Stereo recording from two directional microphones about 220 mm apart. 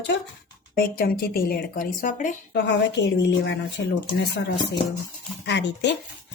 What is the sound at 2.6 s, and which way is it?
A woman's voice, 50° left (ahead or behind).